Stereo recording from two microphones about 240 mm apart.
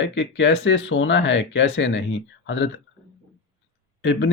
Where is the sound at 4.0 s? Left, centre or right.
Left.